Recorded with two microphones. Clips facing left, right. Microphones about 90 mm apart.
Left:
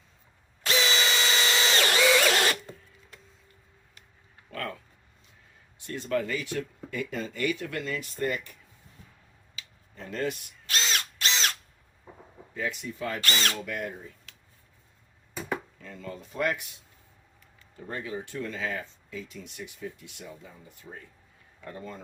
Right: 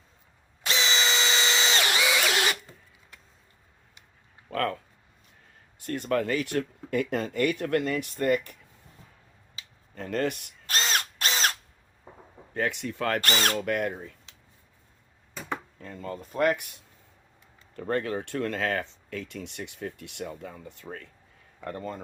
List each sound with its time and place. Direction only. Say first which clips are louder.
0.6 s drill: left 1 dB; 25° right (ahead or behind)
2.0 s drill: left 3 dB; 10° right (ahead or behind)
4.5 s a sound: right 7 dB; 55° right (ahead or behind)
5.8 s speech: right 2 dB; 55° right (ahead or behind)
9.9 s speech: right 3 dB; 55° right (ahead or behind)
10.7 s drill: right 2 dB; 45° right (ahead or behind)
12.1 s a sound: even; 25° right (ahead or behind)
12.5 s speech: right 4 dB; 70° right (ahead or behind)
15.8 s speech: right 3 dB; 45° right (ahead or behind); by 21.1 s 65° right (ahead or behind)
21.6 s speech: right 5 dB; 55° right (ahead or behind)